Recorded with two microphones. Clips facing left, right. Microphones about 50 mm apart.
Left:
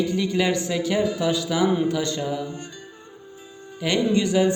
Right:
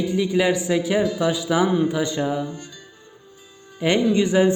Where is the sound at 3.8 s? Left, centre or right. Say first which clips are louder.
Right 3 dB; right.